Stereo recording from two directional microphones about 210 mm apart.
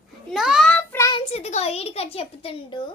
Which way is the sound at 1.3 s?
30° left (ahead or behind).